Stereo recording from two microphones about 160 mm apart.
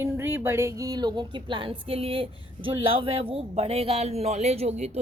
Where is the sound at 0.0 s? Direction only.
15° right (ahead or behind).